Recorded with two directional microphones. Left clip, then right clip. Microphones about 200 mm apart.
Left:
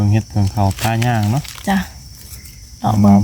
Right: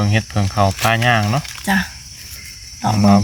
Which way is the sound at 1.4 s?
35° left (ahead or behind).